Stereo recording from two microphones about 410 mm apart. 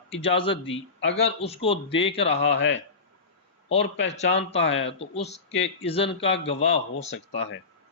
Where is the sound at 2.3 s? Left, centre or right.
Left.